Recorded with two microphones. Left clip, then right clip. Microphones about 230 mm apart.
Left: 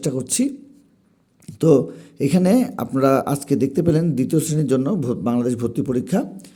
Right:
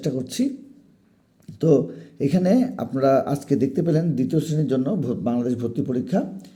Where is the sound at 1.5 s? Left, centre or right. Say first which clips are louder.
Left 3 dB; left.